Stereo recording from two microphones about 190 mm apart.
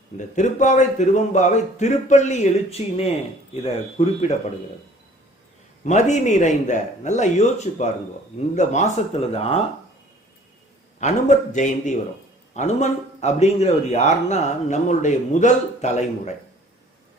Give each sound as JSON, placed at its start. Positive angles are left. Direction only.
{"t": 0.3, "sound": "a man's voice", "side_deg": 40}
{"t": 5.8, "sound": "a man's voice", "side_deg": 40}
{"t": 11.0, "sound": "a man's voice", "side_deg": 40}